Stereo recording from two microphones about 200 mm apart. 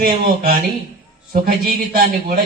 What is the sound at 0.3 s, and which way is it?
A man's voice, 50° right (ahead or behind).